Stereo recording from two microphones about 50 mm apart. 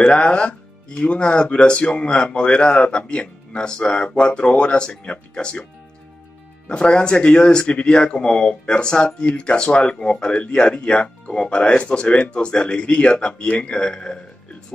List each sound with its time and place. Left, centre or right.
0.0 s speech: centre
6.7 s speech: centre